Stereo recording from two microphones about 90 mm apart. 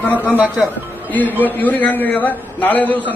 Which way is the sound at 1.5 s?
20° left (ahead or behind).